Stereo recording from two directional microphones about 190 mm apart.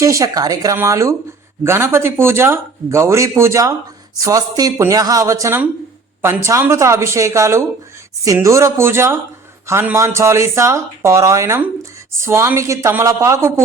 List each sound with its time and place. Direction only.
0.0 s a man's voice: 15° right (ahead or behind)